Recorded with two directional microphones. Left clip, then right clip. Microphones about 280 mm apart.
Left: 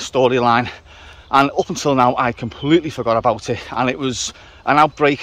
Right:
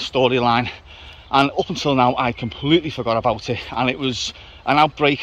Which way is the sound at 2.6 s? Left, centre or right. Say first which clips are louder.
Left 2 dB; left.